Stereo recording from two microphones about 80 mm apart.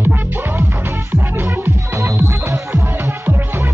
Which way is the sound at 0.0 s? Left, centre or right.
Right.